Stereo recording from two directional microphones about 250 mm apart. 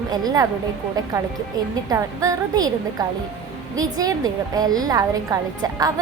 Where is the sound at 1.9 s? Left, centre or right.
Centre.